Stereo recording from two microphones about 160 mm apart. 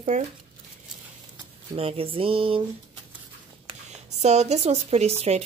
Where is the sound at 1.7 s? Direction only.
35° right (ahead or behind).